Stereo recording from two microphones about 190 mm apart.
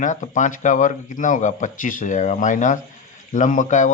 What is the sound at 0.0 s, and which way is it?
Speech, 40° left (ahead or behind).